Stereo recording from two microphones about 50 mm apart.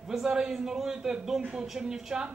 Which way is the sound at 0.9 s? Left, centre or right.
Right.